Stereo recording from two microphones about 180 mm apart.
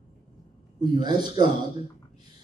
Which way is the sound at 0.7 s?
25° right (ahead or behind).